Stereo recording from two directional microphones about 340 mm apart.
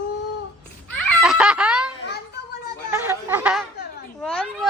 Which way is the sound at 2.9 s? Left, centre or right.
Centre.